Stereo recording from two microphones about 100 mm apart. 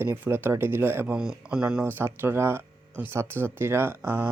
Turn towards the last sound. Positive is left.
turn(degrees=-20)  # may be behind; listen again after turning